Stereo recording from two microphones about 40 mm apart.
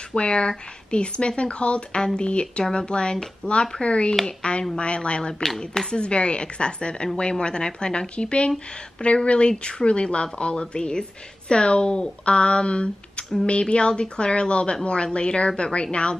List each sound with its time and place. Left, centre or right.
0.1 s speech: left